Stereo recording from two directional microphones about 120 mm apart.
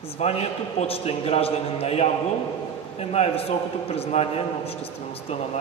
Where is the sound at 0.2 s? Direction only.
60° left (ahead or behind).